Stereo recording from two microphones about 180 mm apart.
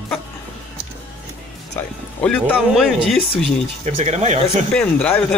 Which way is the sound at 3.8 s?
40° right (ahead or behind).